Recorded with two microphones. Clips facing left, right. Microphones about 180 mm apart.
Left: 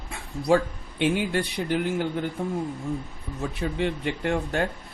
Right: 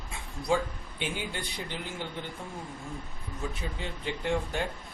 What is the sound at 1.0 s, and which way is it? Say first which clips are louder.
Speech: left 11 dB; 70° left (ahead or behind).